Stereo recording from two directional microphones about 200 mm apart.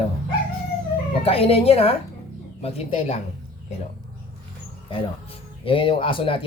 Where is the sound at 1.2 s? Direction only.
30° left (ahead or behind).